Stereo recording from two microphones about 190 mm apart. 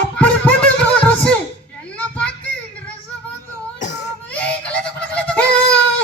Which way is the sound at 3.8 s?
40° left (ahead or behind).